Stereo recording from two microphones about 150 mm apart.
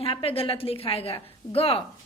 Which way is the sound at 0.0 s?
40° left (ahead or behind).